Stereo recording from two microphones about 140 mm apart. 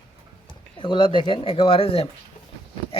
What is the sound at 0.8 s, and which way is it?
A man's voice, 35° left (ahead or behind).